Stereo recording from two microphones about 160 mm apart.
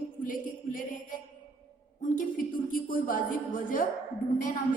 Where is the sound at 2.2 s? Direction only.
55° left (ahead or behind).